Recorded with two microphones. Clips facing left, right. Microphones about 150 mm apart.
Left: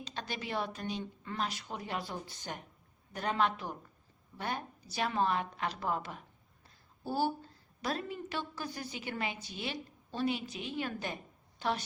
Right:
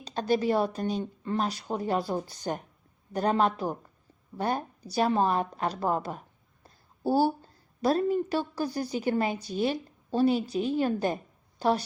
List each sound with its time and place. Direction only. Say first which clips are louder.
0.0 s a woman's voice: right 14 dB; 40° right (ahead or behind)